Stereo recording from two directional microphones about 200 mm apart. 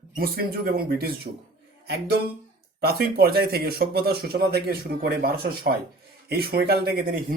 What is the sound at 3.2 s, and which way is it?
A man's voice, 50° right (ahead or behind).